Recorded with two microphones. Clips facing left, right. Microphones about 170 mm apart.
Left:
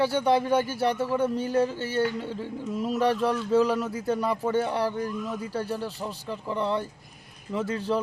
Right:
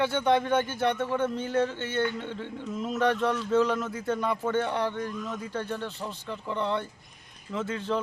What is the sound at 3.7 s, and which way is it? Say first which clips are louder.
A man's voice: left 2 dB; 10° left (ahead or behind).